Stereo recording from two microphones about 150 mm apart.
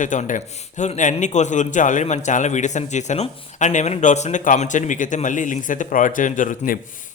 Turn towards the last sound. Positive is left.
turn(degrees=60)  # may be behind; listen again after turning